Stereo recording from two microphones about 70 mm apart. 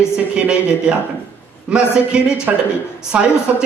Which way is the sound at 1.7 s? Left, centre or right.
Centre.